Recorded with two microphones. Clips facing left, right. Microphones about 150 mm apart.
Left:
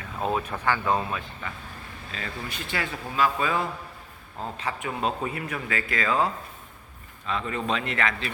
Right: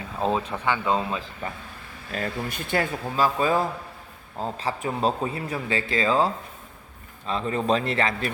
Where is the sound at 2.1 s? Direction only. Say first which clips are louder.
Right 6 dB; 50° right (ahead or behind).